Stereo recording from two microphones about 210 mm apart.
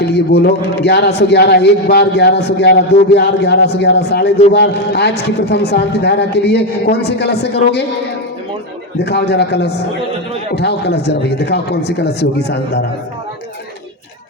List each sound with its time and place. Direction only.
0.0 s a man's voice: 50° left (ahead or behind)
9.0 s a man's voice: 50° left (ahead or behind)